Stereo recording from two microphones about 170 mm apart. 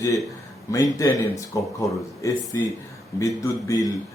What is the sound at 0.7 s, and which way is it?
Speech, 20° left (ahead or behind).